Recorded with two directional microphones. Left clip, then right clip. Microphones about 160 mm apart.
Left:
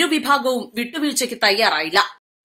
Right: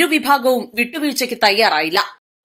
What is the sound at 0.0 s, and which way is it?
A woman's voice, 15° right (ahead or behind).